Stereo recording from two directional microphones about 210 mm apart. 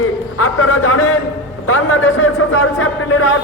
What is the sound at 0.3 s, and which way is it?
A man's voice, 90° left.